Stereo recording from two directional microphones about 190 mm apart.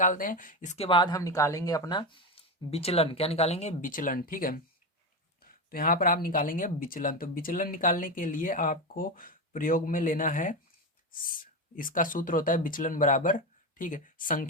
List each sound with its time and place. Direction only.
0.0 s speech: 45° left (ahead or behind)
0.9 s speech: 25° left (ahead or behind); by 14.4 s 45° left (ahead or behind)